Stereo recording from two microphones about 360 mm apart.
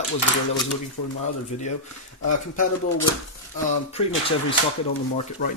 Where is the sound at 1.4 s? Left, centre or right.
Centre.